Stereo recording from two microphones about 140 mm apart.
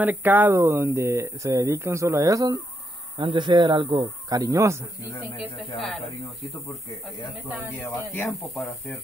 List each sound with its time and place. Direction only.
0.0 s speech: 15° right (ahead or behind)
5.8 s speech: centre (ahead or behind)
7.8 s speech: 10° left (ahead or behind)